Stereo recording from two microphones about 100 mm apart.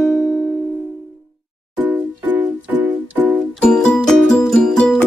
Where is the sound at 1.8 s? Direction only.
15° right (ahead or behind).